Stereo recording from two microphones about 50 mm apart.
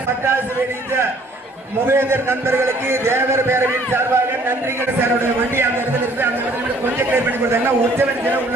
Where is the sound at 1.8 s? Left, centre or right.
Right.